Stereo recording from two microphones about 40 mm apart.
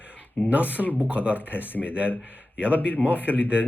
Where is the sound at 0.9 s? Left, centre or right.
Right.